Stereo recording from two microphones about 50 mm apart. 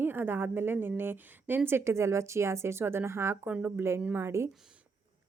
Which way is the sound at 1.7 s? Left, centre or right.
Right.